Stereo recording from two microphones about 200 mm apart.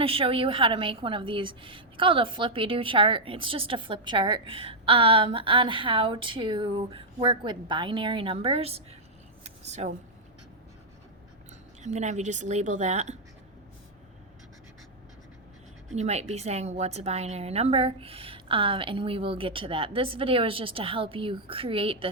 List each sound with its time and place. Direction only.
0.0 s a woman's voice: 30° right (ahead or behind)
9.4 s a sound: 35° right (ahead or behind)
11.8 s a woman's voice: 35° right (ahead or behind)
16.0 s a woman's voice: 35° right (ahead or behind)